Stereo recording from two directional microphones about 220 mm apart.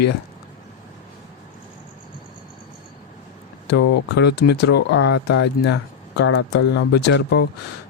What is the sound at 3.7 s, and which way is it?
Speech, 50° left (ahead or behind).